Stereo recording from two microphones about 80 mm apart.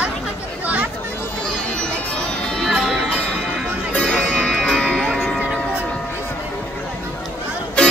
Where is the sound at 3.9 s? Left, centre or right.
Centre.